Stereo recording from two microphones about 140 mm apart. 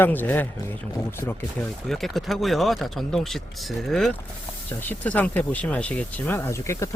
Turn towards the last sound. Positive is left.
turn(degrees=20)  # may be behind; listen again after turning